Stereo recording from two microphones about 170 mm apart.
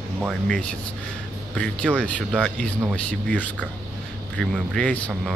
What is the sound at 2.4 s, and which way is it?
A man's voice, 5° left (ahead or behind).